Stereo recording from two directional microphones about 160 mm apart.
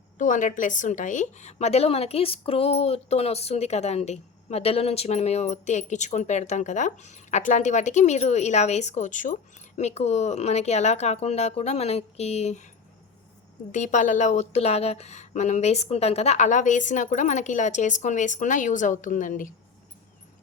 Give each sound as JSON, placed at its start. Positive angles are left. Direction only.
{"t": 0.2, "sound": "a woman's voice", "side_deg": 55}
{"t": 13.7, "sound": "a woman's voice", "side_deg": 50}